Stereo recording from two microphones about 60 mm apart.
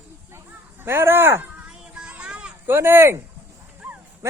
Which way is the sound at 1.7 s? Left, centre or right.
Centre.